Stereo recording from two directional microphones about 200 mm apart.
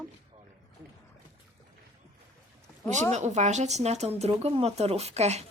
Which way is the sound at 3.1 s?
35° right (ahead or behind).